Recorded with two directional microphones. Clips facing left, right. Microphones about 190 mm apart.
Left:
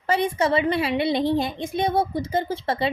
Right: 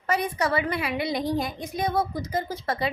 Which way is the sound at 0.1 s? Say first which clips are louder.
Left 4 dB; 25° left (ahead or behind).